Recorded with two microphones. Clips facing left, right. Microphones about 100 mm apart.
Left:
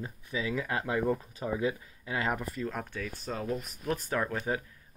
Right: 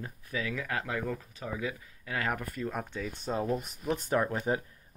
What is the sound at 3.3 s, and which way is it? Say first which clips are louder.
Speech: right 4 dB; 30° right (ahead or behind).